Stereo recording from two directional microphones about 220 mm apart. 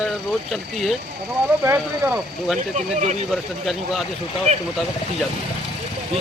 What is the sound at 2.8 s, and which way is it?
Speech, 30° right (ahead or behind).